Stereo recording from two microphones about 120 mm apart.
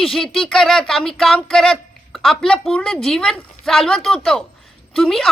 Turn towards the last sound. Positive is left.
turn(degrees=0)  # may be behind; listen again after turning